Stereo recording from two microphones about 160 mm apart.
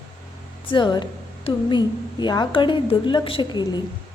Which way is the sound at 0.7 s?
30° left (ahead or behind).